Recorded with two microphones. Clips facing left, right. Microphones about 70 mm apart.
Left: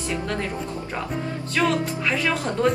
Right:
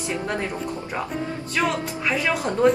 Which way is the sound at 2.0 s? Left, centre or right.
Centre.